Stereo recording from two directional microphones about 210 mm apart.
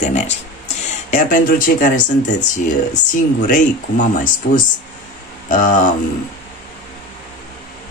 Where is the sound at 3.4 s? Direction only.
40° left (ahead or behind).